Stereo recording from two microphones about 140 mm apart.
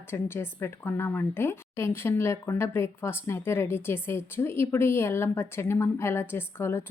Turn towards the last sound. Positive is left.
turn(degrees=15)  # may be behind; listen again after turning